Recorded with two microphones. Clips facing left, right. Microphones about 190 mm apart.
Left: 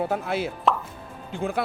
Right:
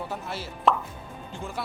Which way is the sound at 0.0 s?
60° left (ahead or behind).